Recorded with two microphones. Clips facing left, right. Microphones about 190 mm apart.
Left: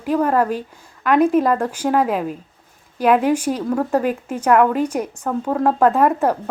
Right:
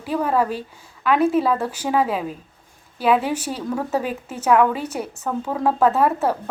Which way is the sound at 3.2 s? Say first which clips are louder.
Left 6 dB; 10° left (ahead or behind).